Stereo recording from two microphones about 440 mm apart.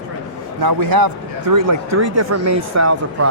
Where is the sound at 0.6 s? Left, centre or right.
Right.